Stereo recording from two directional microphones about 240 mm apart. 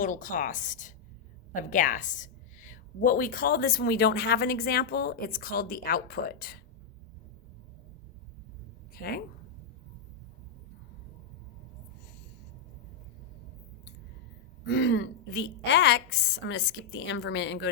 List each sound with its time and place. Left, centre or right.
0.0 s a woman's voice: left
9.0 s a woman's voice: left
14.6 s a woman's voice: left